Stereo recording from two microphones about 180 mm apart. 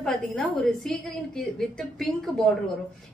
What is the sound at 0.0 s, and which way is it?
A woman's voice, centre (ahead or behind).